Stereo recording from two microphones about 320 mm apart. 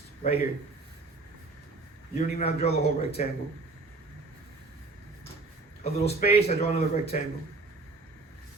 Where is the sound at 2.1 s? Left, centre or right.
Centre.